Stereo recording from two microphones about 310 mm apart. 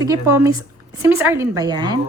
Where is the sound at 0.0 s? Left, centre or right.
Centre.